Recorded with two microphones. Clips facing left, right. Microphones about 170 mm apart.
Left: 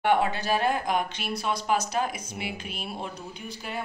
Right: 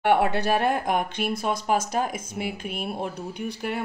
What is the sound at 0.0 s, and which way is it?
Speech, 65° right (ahead or behind).